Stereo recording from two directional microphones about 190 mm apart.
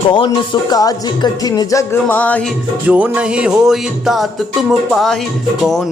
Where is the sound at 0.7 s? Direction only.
20° left (ahead or behind).